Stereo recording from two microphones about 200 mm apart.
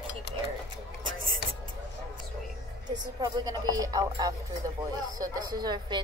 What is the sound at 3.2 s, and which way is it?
Speech, 20° right (ahead or behind).